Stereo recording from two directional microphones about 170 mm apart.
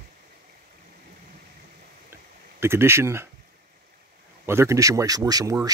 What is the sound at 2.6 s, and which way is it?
Speech, 15° right (ahead or behind).